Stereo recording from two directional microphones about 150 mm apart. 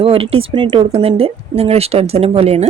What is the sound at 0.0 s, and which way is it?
A woman's voice, 40° right (ahead or behind).